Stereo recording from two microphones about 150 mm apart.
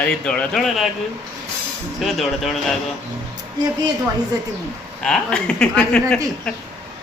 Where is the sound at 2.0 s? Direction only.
Centre (ahead or behind).